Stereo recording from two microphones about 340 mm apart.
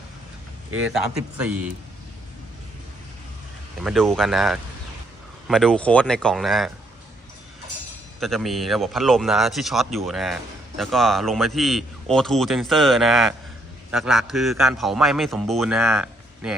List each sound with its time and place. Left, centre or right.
0.8 s speech: centre
3.8 s speech: centre
8.2 s speech: centre